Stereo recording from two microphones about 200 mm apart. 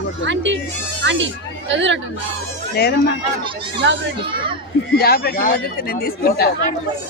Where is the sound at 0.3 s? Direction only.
65° right (ahead or behind).